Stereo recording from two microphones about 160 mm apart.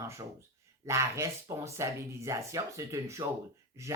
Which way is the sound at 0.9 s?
20° right (ahead or behind).